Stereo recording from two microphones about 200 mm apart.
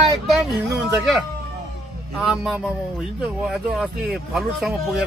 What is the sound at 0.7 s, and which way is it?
Speech, centre (ahead or behind).